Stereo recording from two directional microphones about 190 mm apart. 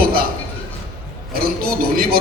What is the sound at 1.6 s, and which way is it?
Speech, 50° right (ahead or behind).